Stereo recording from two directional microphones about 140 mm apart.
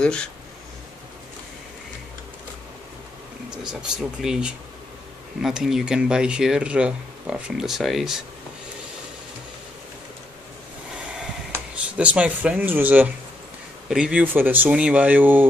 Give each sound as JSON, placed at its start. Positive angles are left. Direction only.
{"t": 0.0, "sound": "speech", "side_deg": 5}
{"t": 3.9, "sound": "speech", "side_deg": -5}
{"t": 11.7, "sound": "speech", "side_deg": -10}